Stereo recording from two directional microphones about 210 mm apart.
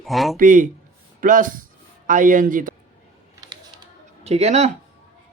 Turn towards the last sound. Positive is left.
turn(degrees=-30)  # may be behind; listen again after turning